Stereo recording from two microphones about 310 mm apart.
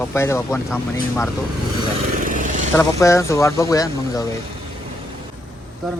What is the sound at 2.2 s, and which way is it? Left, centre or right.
Vehicle, right.